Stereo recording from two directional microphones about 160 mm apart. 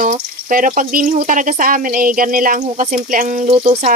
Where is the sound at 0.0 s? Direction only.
55° right (ahead or behind).